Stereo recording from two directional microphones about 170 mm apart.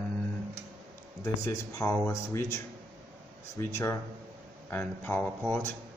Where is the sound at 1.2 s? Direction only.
15° left (ahead or behind).